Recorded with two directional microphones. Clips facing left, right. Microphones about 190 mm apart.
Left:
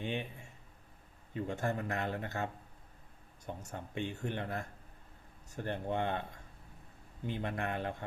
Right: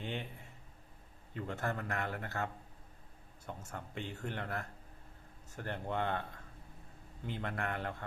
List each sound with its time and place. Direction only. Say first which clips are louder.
0.0 s a sound: left 3 dB; 15° left (ahead or behind)
1.3 s a man's voice: left 3 dB; 15° left (ahead or behind)
3.7 s speech: left 5 dB; 20° left (ahead or behind)
7.3 s a man's voice: left 2 dB; 15° left (ahead or behind)